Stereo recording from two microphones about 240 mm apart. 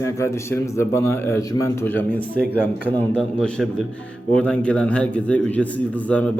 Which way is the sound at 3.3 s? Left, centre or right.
Centre.